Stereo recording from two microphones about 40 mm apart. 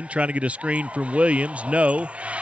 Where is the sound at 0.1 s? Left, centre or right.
Right.